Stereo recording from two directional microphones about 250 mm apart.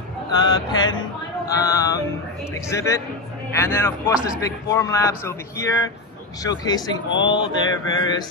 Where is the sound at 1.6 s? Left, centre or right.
Centre.